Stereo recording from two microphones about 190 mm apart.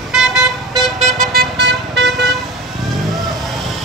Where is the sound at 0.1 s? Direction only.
Centre (ahead or behind).